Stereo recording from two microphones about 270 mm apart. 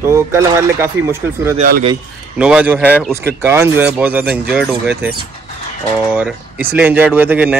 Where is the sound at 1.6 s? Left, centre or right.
Right.